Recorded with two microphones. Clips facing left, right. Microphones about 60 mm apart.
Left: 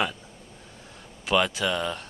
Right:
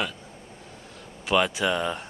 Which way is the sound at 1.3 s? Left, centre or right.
Centre.